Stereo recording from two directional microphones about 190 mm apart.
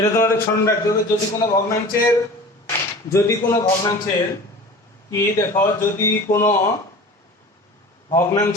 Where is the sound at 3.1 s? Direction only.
15° left (ahead or behind).